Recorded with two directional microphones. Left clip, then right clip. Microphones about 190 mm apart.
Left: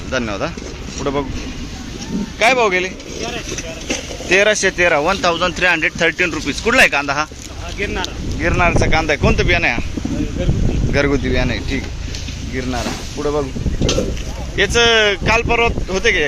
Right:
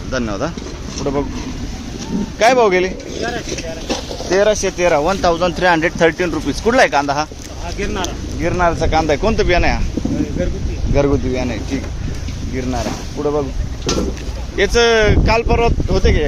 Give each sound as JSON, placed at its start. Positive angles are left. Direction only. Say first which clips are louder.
{"t": 0.1, "sound": "speech", "louder": "even", "side_deg": -5}
{"t": 2.4, "sound": "speech", "louder": "right 2 dB", "side_deg": -25}
{"t": 3.8, "sound": "a sound", "louder": "left 2 dB", "side_deg": 20}
{"t": 4.4, "sound": "speech", "louder": "left 1 dB", "side_deg": 0}
{"t": 5.2, "sound": "speech", "louder": "right 1 dB", "side_deg": -20}
{"t": 8.4, "sound": "speech", "louder": "even", "side_deg": -5}
{"t": 10.9, "sound": "speech", "louder": "right 1 dB", "side_deg": 0}
{"t": 14.5, "sound": "speech", "louder": "even", "side_deg": -10}